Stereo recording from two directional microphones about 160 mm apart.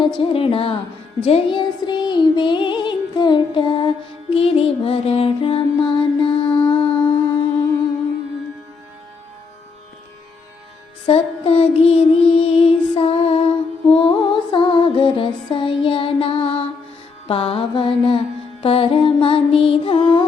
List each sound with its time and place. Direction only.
0.2 s a woman's voice: 35° left (ahead or behind)
1.2 s music: 35° left (ahead or behind)
11.0 s child singing: 35° left (ahead or behind)
13.8 s music: 35° left (ahead or behind)